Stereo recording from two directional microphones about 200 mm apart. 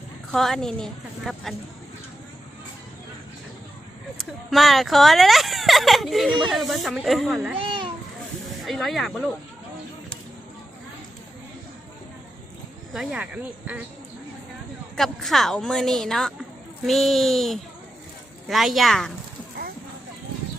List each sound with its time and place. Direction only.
0.3 s speech: centre (ahead or behind)
4.2 s speech: centre (ahead or behind)
8.6 s speech: centre (ahead or behind)
12.9 s speech: centre (ahead or behind)
14.9 s speech: centre (ahead or behind)